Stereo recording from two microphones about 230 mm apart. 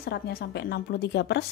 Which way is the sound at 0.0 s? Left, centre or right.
Left.